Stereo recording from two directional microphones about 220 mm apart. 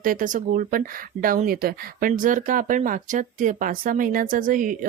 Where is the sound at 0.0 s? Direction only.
35° right (ahead or behind).